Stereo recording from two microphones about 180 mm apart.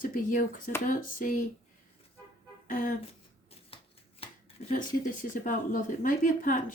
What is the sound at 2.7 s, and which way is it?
Speech, 50° left (ahead or behind).